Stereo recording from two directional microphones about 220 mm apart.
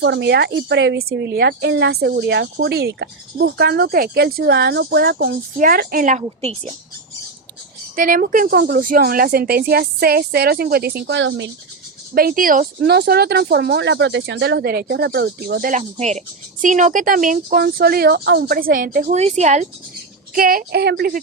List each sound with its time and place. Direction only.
0.0 s speech: 50° right (ahead or behind); by 6.7 s 30° right (ahead or behind)
7.9 s speech: 40° right (ahead or behind); by 11.5 s 55° right (ahead or behind)
12.1 s a woman's voice: 40° right (ahead or behind)